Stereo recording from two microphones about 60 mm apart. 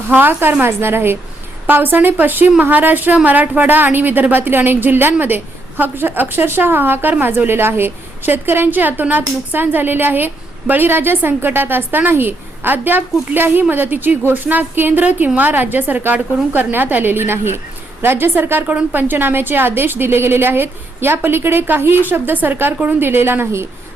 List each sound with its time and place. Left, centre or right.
0.1 s a woman's voice: right
18.7 s a woman's voice: right